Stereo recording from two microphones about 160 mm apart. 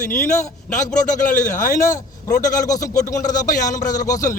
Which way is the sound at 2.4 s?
20° left (ahead or behind).